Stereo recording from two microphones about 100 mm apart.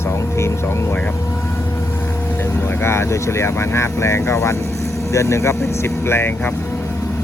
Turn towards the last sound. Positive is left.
turn(degrees=25)  # may be behind; listen again after turning